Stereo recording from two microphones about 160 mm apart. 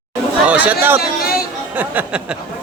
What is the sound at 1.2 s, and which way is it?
Chatter, 70° left (ahead or behind).